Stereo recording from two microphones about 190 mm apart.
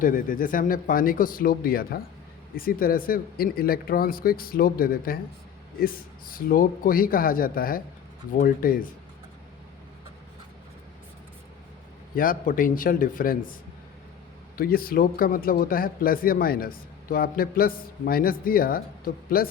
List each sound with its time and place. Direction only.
0.0 s speech: 45° left (ahead or behind)
12.1 s speech: 45° left (ahead or behind)